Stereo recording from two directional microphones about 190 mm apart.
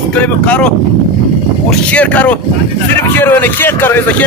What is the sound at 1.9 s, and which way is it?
Speech, 5° left (ahead or behind).